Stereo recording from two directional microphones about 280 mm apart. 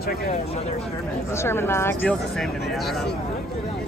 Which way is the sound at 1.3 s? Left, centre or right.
Centre.